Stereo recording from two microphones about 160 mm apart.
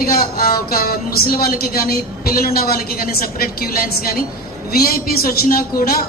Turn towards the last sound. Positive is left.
turn(degrees=70)  # may be behind; listen again after turning